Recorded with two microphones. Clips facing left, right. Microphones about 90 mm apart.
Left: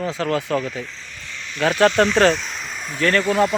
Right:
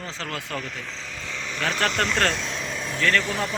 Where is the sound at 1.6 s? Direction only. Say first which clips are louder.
Left 9 dB; 10° left (ahead or behind).